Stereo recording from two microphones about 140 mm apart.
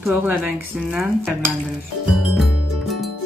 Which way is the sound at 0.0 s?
10° right (ahead or behind).